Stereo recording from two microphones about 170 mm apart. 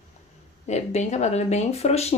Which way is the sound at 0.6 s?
40° left (ahead or behind).